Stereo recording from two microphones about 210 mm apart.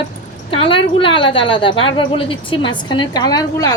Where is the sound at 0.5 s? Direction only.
25° left (ahead or behind).